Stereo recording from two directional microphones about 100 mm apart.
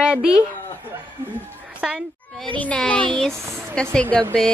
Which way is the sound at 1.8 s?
10° right (ahead or behind).